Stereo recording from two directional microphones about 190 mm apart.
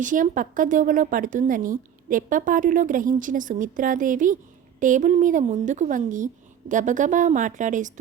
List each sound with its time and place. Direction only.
0.0 s a woman's voice: 45° right (ahead or behind)